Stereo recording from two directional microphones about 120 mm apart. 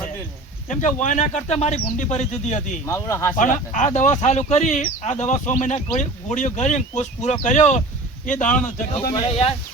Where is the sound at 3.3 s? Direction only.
90° left; by 7.8 s 75° left (ahead or behind).